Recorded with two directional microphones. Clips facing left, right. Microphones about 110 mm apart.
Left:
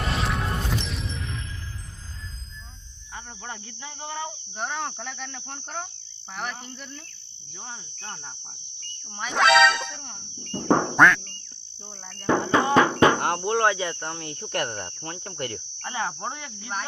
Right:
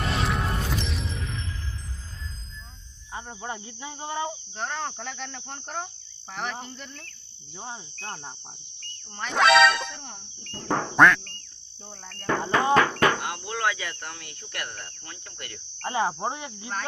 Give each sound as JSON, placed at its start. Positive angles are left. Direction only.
{"t": 0.0, "sound": "music", "side_deg": 0}
{"t": 3.4, "sound": "cricket", "side_deg": -25}
{"t": 3.7, "sound": "insect", "side_deg": -10}
{"t": 4.5, "sound": "speech", "side_deg": 0}
{"t": 7.5, "sound": "insect", "side_deg": -30}
{"t": 9.1, "sound": "speech", "side_deg": 0}
{"t": 10.5, "sound": "speech", "side_deg": 25}
{"t": 10.8, "sound": "speech", "side_deg": 0}
{"t": 12.2, "sound": "speech", "side_deg": 20}
{"t": 13.1, "sound": "insect", "side_deg": 60}
{"t": 13.4, "sound": "speech", "side_deg": 30}
{"t": 14.4, "sound": "insect", "side_deg": 60}
{"t": 15.8, "sound": "cricket", "side_deg": -30}